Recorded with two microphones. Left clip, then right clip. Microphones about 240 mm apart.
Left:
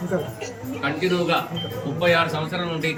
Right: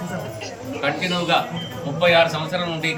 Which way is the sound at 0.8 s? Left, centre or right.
Centre.